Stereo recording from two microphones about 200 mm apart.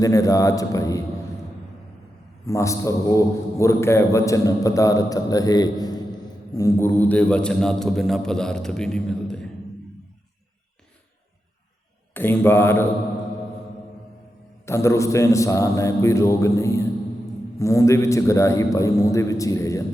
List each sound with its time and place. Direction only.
0.0 s a man's voice: 15° left (ahead or behind)
2.5 s a man's voice: 15° left (ahead or behind)
12.1 s a man's voice: 10° left (ahead or behind)
14.7 s a man's voice: 15° left (ahead or behind)